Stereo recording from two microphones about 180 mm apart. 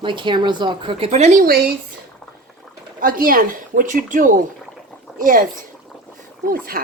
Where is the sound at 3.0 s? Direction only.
50° right (ahead or behind).